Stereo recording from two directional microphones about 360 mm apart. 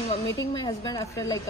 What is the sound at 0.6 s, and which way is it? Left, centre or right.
Speech, centre.